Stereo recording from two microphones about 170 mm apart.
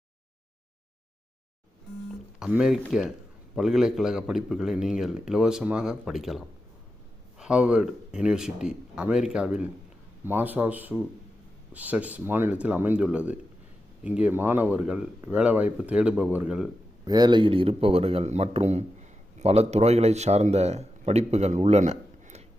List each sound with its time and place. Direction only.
2.4 s a man's voice: 5° right (ahead or behind)
17.1 s a man's voice: 25° right (ahead or behind); by 22.4 s 40° right (ahead or behind)